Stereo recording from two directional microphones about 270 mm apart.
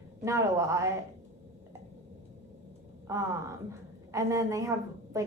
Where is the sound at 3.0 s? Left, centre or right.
Centre.